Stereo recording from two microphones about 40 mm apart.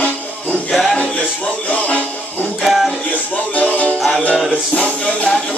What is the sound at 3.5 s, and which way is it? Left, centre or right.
Music, left.